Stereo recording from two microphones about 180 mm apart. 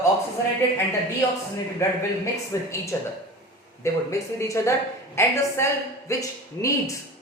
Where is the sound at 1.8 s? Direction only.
15° left (ahead or behind).